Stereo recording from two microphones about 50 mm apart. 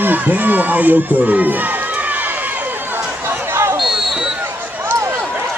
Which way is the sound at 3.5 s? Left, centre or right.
Right.